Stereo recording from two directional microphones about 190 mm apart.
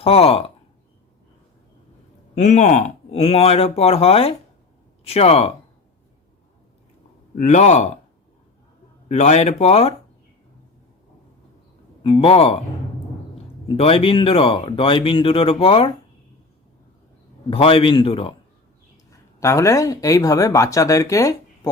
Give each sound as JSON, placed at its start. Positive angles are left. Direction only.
{"t": 0.0, "sound": "speech", "side_deg": 30}
{"t": 2.3, "sound": "speech", "side_deg": 40}
{"t": 7.3, "sound": "speech", "side_deg": 40}
{"t": 9.0, "sound": "speech", "side_deg": 35}
{"t": 12.0, "sound": "speech", "side_deg": 30}
{"t": 13.7, "sound": "speech", "side_deg": 30}
{"t": 17.5, "sound": "speech", "side_deg": 30}
{"t": 19.4, "sound": "speech", "side_deg": 15}